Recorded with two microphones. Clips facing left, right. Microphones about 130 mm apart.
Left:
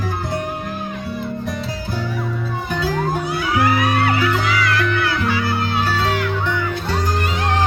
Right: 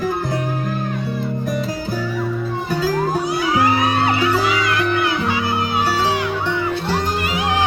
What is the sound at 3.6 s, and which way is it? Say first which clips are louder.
Music: left 1 dB; 25° right (ahead or behind).